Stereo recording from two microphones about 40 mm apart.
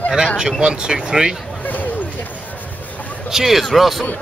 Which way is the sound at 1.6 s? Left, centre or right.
Left.